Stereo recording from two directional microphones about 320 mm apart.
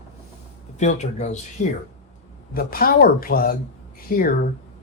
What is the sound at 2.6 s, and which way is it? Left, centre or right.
Speech, left.